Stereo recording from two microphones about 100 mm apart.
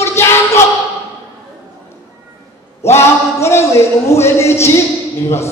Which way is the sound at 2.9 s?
25° left (ahead or behind).